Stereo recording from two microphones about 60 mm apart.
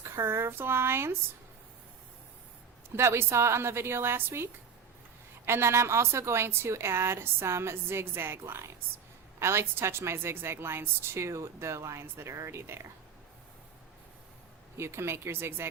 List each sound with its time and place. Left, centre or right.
0.0 s a woman's voice: right
2.9 s a woman's voice: right
5.5 s a woman's voice: right
12.0 s a woman's voice: right
14.8 s a woman's voice: right